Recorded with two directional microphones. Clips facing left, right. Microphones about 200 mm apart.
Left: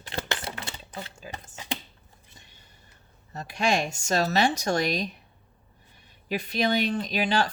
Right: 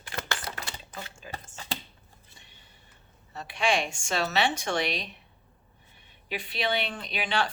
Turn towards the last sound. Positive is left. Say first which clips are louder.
# left 5 dB
turn(degrees=40)  # may be behind; listen again after turning